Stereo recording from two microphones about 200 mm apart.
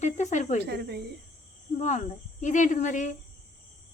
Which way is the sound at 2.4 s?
40° left (ahead or behind).